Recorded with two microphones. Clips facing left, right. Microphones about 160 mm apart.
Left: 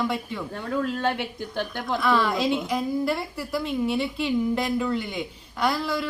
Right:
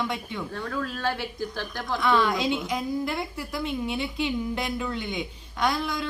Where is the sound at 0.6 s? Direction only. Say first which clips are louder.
Left 5 dB; 20° left (ahead or behind).